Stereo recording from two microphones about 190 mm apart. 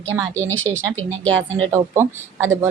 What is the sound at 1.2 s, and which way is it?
Speech, 90° right.